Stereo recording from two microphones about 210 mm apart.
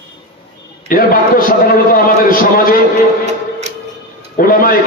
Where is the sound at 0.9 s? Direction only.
40° left (ahead or behind).